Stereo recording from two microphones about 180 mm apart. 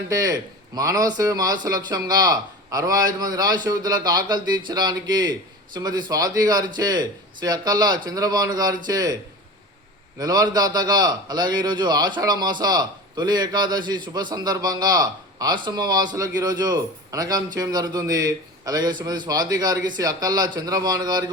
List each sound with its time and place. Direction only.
0.1 s a man's voice: 20° right (ahead or behind)
10.2 s a man's voice: 20° right (ahead or behind)